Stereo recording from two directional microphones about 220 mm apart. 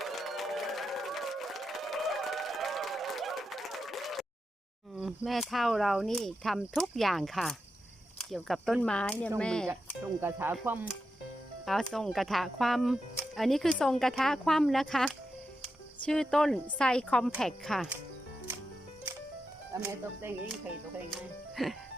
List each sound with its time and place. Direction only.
0.0 s crowd: centre (ahead or behind)
4.9 s speech: centre (ahead or behind)
9.6 s speech: 10° right (ahead or behind)
19.7 s speech: 15° right (ahead or behind)
21.1 s speech: centre (ahead or behind)